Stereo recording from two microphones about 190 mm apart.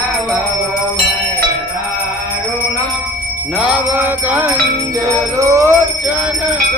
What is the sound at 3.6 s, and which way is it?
Music, 10° right (ahead or behind).